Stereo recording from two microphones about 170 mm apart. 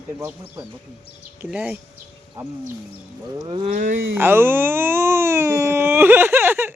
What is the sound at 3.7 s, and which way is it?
Speech, 50° right (ahead or behind).